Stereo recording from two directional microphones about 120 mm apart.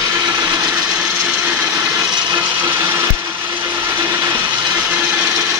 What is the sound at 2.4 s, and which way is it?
Wood, 15° right (ahead or behind).